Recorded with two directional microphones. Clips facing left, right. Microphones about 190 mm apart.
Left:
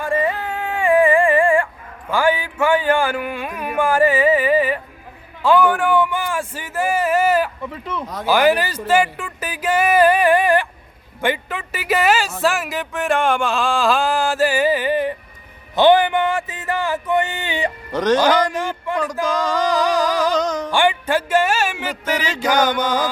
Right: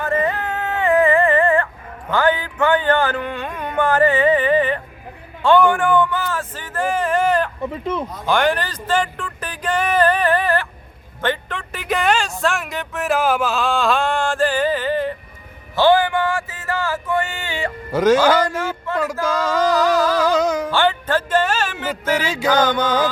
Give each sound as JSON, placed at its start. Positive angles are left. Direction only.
{"t": 0.0, "sound": "a sound", "side_deg": 10}
{"t": 7.6, "sound": "speech", "side_deg": -20}
{"t": 8.3, "sound": "speech", "side_deg": 5}
{"t": 15.7, "sound": "a sound", "side_deg": 20}
{"t": 17.9, "sound": "speech", "side_deg": -5}
{"t": 18.4, "sound": "a sound", "side_deg": 15}
{"t": 19.1, "sound": "mantra", "side_deg": 15}
{"t": 19.7, "sound": "humming", "side_deg": 15}
{"t": 20.3, "sound": "music", "side_deg": -10}
{"t": 20.7, "sound": "music", "side_deg": 15}
{"t": 22.2, "sound": "speech", "side_deg": -10}
{"t": 22.4, "sound": "mantra", "side_deg": 10}